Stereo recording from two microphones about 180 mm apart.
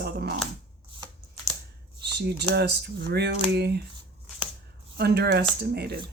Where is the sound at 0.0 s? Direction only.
65° right (ahead or behind).